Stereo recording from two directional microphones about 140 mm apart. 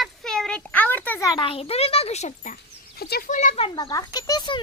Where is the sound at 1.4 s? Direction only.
45° left (ahead or behind).